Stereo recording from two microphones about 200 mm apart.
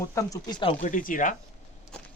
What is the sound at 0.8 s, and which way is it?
Speech, 40° left (ahead or behind).